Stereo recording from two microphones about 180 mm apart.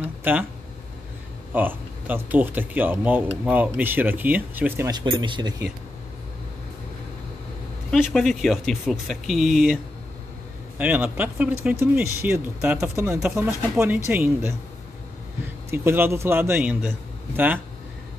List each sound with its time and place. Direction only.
0.0 s a sound: 10° right (ahead or behind)
1.5 s speech: 10° right (ahead or behind)
4.9 s speech: 25° right (ahead or behind)
8.0 s speech: centre (ahead or behind)
10.8 s speech: 10° right (ahead or behind)
15.7 s speech: 10° right (ahead or behind)